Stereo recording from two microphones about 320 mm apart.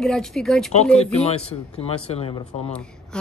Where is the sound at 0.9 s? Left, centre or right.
Centre.